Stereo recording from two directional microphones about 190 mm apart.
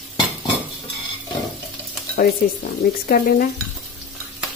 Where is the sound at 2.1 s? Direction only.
50° left (ahead or behind).